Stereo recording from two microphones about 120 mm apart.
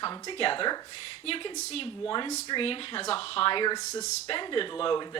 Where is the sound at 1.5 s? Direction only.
60° left (ahead or behind).